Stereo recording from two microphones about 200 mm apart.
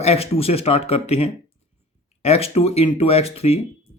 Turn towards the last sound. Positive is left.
turn(degrees=30)  # may be behind; listen again after turning